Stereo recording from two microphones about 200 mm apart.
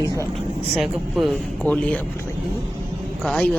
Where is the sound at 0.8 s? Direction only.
Centre (ahead or behind).